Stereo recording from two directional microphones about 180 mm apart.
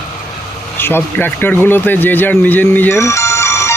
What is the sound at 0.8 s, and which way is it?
A man's voice, 10° left (ahead or behind).